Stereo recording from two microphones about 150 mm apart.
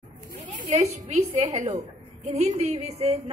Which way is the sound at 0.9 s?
50° right (ahead or behind).